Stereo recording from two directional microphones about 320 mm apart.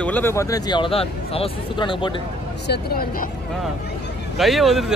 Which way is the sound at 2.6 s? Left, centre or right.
Left.